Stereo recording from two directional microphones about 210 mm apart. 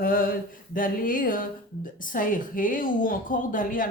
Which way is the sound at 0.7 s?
40° left (ahead or behind).